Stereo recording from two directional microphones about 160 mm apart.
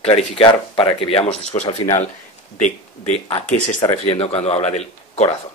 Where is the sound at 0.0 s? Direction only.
35° left (ahead or behind).